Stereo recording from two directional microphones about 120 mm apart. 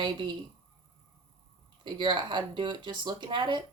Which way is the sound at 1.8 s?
40° right (ahead or behind).